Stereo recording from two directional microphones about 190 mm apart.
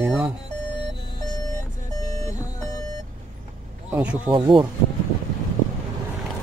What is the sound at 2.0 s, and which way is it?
Vehicle, 15° left (ahead or behind).